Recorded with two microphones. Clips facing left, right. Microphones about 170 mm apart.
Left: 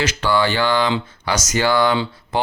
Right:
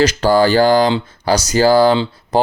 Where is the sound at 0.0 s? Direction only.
40° right (ahead or behind).